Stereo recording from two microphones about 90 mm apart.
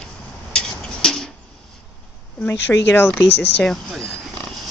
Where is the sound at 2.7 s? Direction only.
30° left (ahead or behind).